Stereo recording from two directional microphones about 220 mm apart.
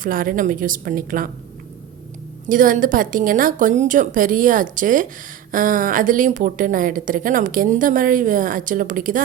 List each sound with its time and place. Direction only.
0.0 s a woman's voice: 40° right (ahead or behind)
2.5 s a woman's voice: 35° right (ahead or behind)